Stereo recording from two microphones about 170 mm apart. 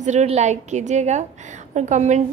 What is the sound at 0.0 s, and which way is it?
A woman's voice, 45° right (ahead or behind).